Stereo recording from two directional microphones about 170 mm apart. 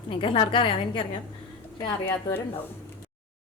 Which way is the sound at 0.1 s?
30° left (ahead or behind).